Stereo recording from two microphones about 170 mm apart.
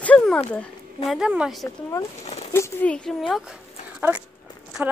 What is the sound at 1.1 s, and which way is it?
Speech, 5° right (ahead or behind).